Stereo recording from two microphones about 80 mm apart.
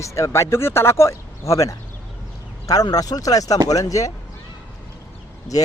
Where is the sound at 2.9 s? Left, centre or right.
Left.